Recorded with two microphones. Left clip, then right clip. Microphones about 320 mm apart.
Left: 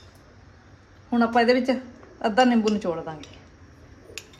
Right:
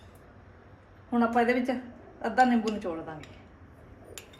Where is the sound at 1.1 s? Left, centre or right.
Left.